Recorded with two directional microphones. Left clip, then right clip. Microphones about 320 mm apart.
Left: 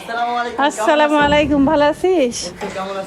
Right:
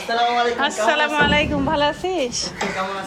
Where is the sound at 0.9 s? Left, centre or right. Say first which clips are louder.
Left 4 dB; centre.